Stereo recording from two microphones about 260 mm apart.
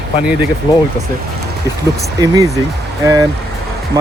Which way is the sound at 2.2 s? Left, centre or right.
Centre.